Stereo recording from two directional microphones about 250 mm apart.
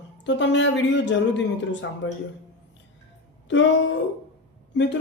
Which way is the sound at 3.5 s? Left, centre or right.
Left.